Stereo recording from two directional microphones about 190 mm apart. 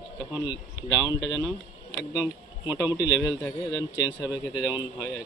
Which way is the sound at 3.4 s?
20° left (ahead or behind).